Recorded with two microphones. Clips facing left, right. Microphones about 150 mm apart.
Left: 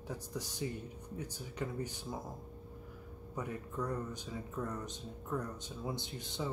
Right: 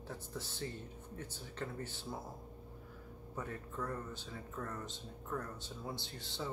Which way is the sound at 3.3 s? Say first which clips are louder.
Left 3 dB; 15° left (ahead or behind).